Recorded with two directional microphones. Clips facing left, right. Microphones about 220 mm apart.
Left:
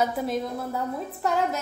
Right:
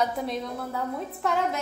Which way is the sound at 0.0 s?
Centre (ahead or behind).